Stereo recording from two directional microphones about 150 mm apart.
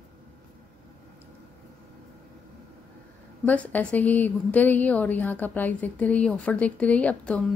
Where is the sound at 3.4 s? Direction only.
10° left (ahead or behind).